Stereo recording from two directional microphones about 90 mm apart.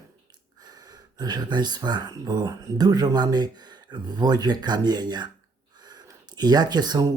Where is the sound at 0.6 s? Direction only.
50° right (ahead or behind).